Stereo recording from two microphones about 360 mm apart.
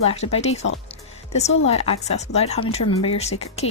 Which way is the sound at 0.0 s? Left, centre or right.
Centre.